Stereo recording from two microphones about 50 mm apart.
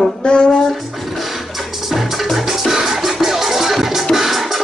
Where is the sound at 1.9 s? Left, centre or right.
Centre.